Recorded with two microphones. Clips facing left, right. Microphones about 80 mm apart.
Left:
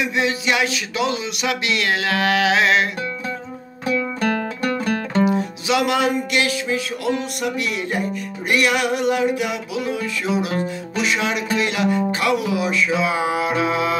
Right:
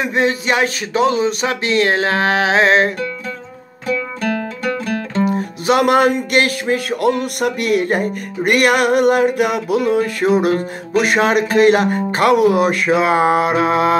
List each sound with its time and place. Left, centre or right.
0.0 s speech: right
3.8 s music: centre
5.3 s music: right